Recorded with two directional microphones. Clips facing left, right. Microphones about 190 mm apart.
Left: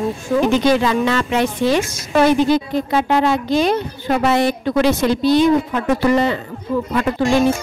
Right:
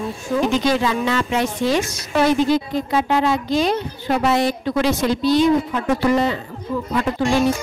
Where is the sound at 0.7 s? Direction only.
65° left (ahead or behind).